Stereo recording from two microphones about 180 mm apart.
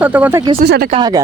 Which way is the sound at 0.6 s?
60° right (ahead or behind).